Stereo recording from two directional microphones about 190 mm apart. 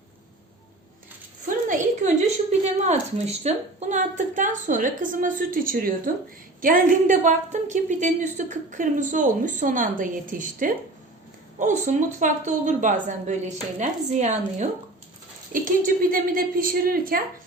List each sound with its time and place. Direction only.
1.5 s a woman's voice: 45° right (ahead or behind)
15.6 s a woman's voice: 50° right (ahead or behind)